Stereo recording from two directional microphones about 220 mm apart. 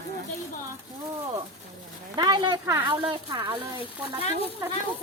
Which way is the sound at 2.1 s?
20° right (ahead or behind).